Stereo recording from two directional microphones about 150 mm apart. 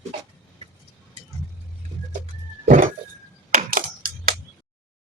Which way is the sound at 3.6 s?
70° right (ahead or behind).